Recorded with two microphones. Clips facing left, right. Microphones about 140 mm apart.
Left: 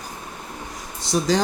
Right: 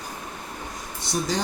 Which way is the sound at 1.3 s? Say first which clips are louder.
Left 8 dB; 90° left.